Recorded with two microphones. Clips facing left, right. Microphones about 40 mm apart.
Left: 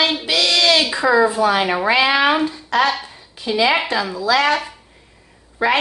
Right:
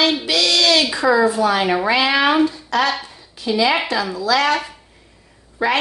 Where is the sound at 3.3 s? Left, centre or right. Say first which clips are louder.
Even; left.